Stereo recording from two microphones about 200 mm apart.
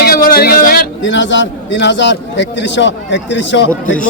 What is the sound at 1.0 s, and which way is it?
A man's voice, 65° left (ahead or behind).